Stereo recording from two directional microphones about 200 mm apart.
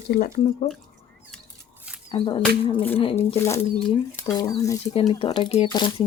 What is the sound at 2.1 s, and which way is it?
Speech, 25° left (ahead or behind).